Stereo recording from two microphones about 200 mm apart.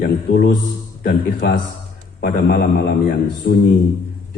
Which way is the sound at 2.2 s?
55° left (ahead or behind).